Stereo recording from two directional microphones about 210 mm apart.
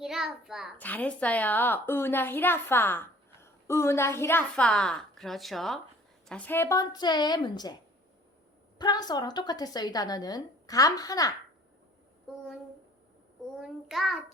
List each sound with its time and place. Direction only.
0.0 s a child's voice: centre (ahead or behind); by 7.7 s 20° left (ahead or behind)
8.8 s a woman's voice: 20° left (ahead or behind)
13.6 s child singing: centre (ahead or behind)